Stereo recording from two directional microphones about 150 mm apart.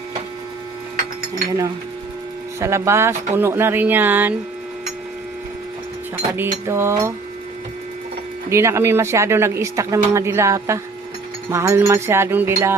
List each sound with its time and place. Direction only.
2.6 s speech: 20° right (ahead or behind)
6.3 s speech: 15° right (ahead or behind)
8.4 s speech: 20° right (ahead or behind)